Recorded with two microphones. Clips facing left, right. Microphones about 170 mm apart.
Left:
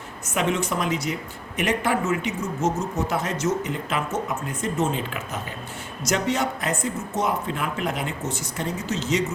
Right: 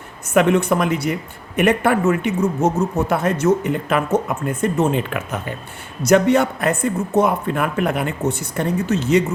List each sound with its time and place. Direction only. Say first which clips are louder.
0.3 s speech: right 9 dB; 60° right (ahead or behind)